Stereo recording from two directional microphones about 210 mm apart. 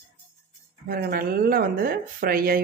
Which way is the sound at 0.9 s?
45° right (ahead or behind).